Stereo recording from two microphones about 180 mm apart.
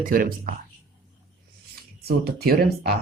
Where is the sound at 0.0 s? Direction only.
50° right (ahead or behind).